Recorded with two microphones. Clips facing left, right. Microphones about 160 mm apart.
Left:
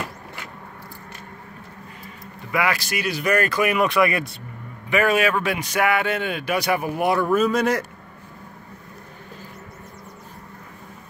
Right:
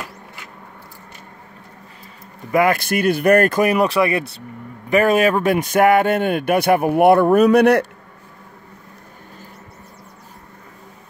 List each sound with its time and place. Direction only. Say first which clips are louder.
2.5 s a man's voice: right 7 dB; 50° right (ahead or behind)
3.6 s speech: right 3 dB; 35° right (ahead or behind)
4.8 s a man's voice: right 5 dB; 40° right (ahead or behind); by 7.8 s 65° right (ahead or behind)